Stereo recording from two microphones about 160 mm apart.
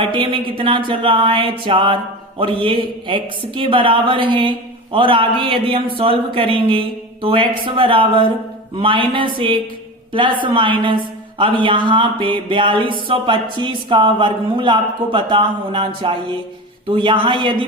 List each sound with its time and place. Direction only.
0.0 s a woman's voice: 30° right (ahead or behind)